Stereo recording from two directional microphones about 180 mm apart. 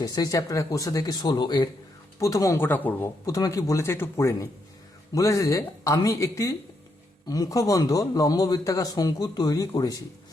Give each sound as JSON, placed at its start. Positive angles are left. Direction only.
{"t": 0.0, "sound": "a man's voice", "side_deg": 20}